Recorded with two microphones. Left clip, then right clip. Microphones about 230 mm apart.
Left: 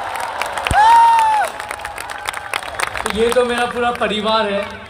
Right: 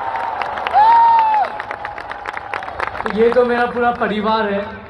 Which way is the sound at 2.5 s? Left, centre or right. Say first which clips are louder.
Left 1 dB; left.